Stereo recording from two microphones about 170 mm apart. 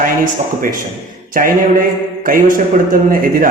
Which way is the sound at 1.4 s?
55° right (ahead or behind).